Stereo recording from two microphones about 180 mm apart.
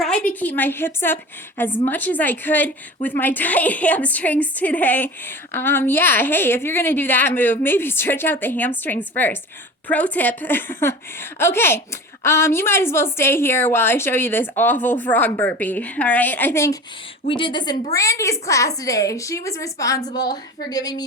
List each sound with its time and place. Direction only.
0.0 s a woman's voice: 5° left (ahead or behind)
17.2 s a woman's voice: 25° left (ahead or behind)